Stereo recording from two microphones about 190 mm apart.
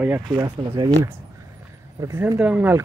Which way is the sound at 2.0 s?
15° right (ahead or behind).